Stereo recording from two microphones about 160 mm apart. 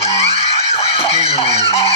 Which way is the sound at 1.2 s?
40° left (ahead or behind).